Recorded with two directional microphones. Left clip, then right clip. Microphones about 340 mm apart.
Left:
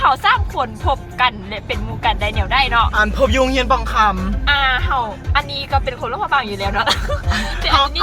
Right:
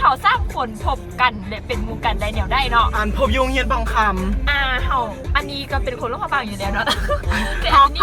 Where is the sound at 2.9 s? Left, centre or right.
Centre.